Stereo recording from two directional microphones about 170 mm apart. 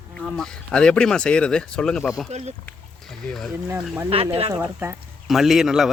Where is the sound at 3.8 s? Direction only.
10° right (ahead or behind).